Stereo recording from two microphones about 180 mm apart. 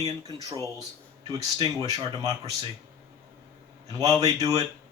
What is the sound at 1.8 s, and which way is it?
Speech, 20° right (ahead or behind).